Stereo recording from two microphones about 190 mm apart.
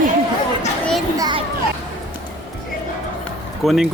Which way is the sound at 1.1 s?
20° right (ahead or behind).